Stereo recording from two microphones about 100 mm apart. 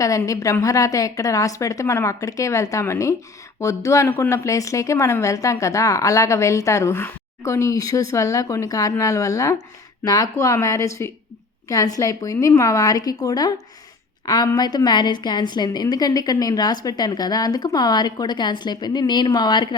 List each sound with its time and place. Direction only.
0.3 s a woman's voice: 35° left (ahead or behind)